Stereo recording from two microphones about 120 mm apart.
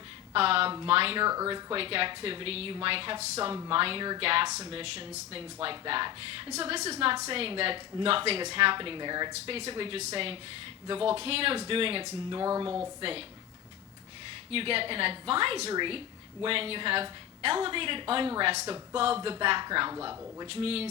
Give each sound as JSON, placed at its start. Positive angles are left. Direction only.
{"t": 0.3, "sound": "a woman's voice", "side_deg": -50}
{"t": 3.2, "sound": "a woman's voice", "side_deg": -60}
{"t": 3.7, "sound": "a woman's voice", "side_deg": -50}
{"t": 6.5, "sound": "a woman's voice", "side_deg": -60}
{"t": 12.4, "sound": "speech", "side_deg": -30}
{"t": 13.0, "sound": "a woman's voice", "side_deg": -50}
{"t": 14.5, "sound": "a woman's voice", "side_deg": -50}
{"t": 15.7, "sound": "a woman's voice", "side_deg": -40}
{"t": 20.5, "sound": "a woman's voice", "side_deg": -55}